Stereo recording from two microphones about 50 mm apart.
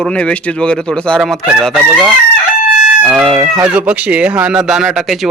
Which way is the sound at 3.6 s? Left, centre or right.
Right.